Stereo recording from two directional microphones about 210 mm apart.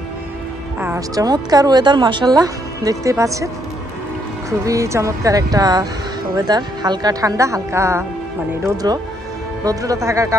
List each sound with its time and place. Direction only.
0.7 s a woman's voice: 10° right (ahead or behind)
4.5 s a woman's voice: 15° right (ahead or behind)